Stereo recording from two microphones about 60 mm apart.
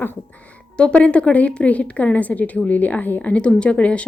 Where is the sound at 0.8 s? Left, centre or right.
Centre.